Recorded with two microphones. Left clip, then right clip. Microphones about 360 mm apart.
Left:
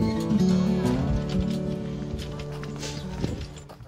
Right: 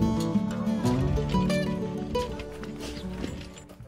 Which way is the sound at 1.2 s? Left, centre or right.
Right.